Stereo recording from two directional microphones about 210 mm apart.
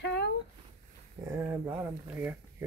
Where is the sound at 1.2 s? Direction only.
10° right (ahead or behind).